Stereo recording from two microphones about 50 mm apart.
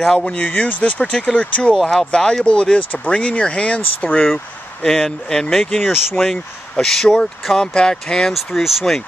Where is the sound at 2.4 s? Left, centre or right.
Centre.